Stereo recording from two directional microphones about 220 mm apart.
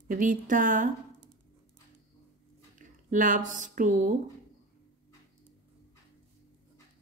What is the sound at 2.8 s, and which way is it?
Speech, 35° right (ahead or behind).